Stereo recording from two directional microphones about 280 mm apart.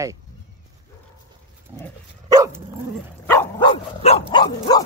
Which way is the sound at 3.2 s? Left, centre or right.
Centre.